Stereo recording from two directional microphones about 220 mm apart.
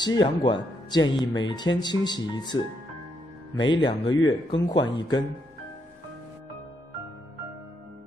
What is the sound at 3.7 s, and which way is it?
Speech, 20° left (ahead or behind).